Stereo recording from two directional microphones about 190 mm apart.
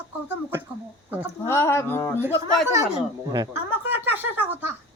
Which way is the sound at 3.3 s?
15° right (ahead or behind).